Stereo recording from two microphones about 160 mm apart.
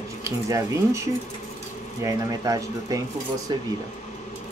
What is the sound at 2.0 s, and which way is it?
Speech, 20° right (ahead or behind).